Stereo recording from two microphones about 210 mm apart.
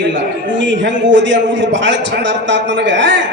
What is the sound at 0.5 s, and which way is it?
A man's voice, 60° right (ahead or behind).